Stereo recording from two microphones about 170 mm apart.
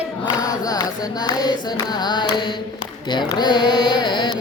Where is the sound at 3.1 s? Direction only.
25° left (ahead or behind).